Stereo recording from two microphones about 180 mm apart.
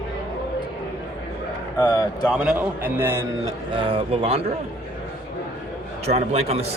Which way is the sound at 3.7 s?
30° right (ahead or behind).